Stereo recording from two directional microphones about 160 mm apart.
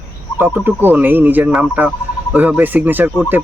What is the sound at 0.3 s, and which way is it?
Speech, 10° right (ahead or behind).